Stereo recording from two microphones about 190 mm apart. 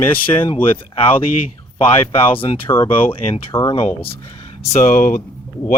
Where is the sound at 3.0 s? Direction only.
30° left (ahead or behind).